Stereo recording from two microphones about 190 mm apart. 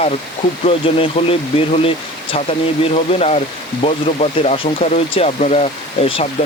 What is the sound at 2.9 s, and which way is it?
Speech, 35° left (ahead or behind).